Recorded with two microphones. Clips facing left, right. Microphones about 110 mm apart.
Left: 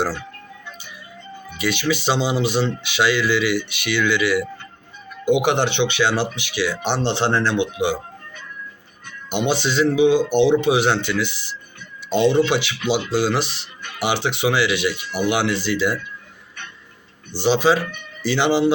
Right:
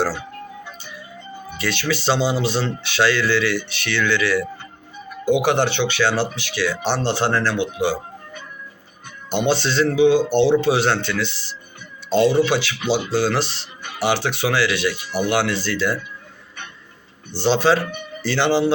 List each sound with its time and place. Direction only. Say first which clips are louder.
0.1 s ice cream truck: right 1 dB; 10° right (ahead or behind)
1.5 s speech: left 2 dB; 15° left (ahead or behind)
9.5 s speech: even; 15° left (ahead or behind)
12.5 s speech: even; 20° left (ahead or behind)
17.3 s speech: even; 10° left (ahead or behind)